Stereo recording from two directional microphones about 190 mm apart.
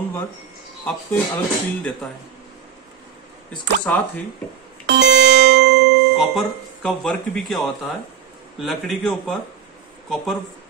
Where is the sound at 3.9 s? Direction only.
5° left (ahead or behind).